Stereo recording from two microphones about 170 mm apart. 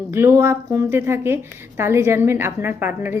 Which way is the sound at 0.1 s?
15° right (ahead or behind).